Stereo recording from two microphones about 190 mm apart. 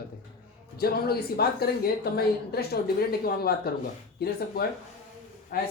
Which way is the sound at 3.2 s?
55° left (ahead or behind).